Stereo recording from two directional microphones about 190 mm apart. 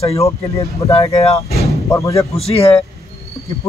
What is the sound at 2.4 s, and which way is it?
Speech, 30° left (ahead or behind).